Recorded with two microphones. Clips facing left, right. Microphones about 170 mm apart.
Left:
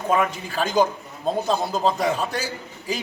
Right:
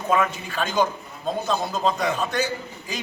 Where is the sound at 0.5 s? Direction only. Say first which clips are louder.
Left 3 dB; 35° left (ahead or behind).